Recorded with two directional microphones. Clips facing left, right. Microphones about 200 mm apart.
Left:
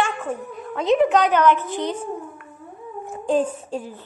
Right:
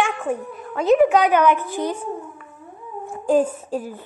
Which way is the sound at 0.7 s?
5° right (ahead or behind).